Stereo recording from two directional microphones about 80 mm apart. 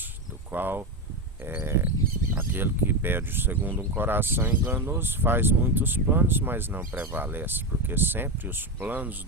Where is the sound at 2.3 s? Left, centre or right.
Right.